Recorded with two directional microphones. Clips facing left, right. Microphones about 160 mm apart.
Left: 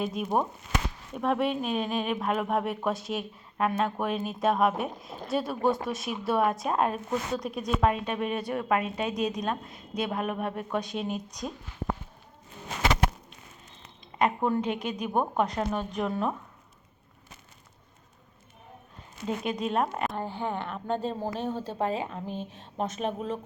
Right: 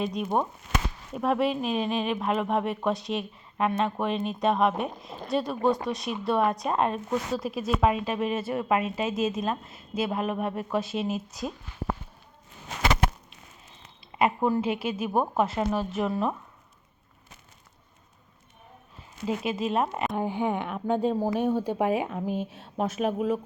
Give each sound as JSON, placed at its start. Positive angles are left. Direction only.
{"t": 0.0, "sound": "speech", "side_deg": 0}
{"t": 14.2, "sound": "speech", "side_deg": -5}
{"t": 19.5, "sound": "speech", "side_deg": -5}
{"t": 20.1, "sound": "speech", "side_deg": -15}